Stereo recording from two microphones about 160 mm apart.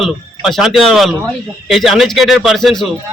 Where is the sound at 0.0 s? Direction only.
Centre (ahead or behind).